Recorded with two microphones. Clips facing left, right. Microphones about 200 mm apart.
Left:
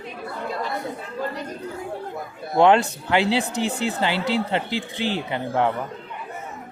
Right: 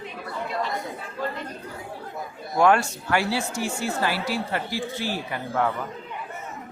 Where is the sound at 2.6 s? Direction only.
20° left (ahead or behind).